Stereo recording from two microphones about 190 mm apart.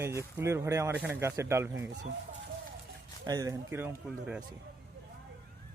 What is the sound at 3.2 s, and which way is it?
Speech, 20° right (ahead or behind).